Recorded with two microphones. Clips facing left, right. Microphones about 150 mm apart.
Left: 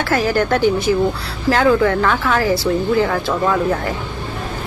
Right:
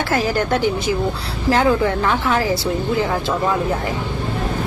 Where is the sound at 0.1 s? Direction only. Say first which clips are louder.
Left 3 dB; 25° right (ahead or behind).